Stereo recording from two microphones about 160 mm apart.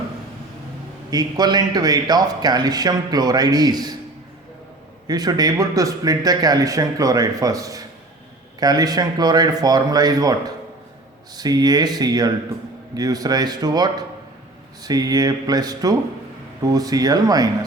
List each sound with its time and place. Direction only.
1.1 s a man's voice: 25° right (ahead or behind)
5.0 s a man's voice: 25° right (ahead or behind)